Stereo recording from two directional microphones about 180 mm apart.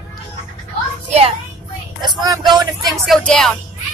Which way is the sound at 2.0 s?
20° right (ahead or behind).